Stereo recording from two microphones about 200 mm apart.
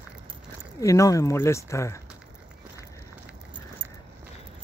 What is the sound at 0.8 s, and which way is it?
Speech, 15° left (ahead or behind).